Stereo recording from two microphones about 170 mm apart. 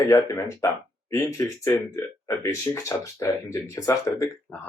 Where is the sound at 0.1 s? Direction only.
20° left (ahead or behind).